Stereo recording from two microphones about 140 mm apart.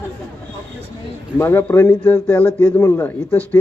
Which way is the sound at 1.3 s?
15° left (ahead or behind).